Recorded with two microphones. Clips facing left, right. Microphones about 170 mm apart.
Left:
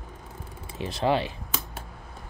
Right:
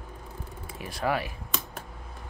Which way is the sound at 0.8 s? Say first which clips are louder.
Left 4 dB; 25° left (ahead or behind).